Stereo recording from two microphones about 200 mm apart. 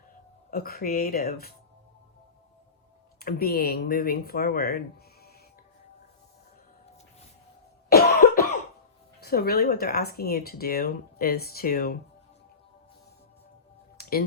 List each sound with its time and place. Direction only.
0.5 s speech: 50° left (ahead or behind)
3.2 s speech: 50° left (ahead or behind)
7.9 s cough: 50° left (ahead or behind)
9.2 s speech: 50° left (ahead or behind)
14.0 s music: 50° left (ahead or behind)